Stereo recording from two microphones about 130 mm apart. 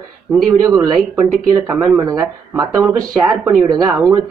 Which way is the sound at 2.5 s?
25° right (ahead or behind).